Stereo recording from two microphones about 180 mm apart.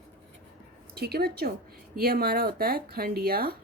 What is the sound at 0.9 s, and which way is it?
Speech, 60° right (ahead or behind).